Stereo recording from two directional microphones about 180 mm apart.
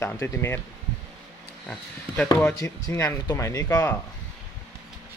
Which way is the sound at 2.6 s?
20° left (ahead or behind).